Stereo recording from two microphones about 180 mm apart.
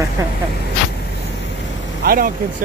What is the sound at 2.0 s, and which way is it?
Speech, 55° right (ahead or behind).